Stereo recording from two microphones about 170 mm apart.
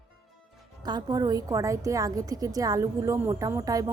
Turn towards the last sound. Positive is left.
turn(degrees=-20)  # may be behind; listen again after turning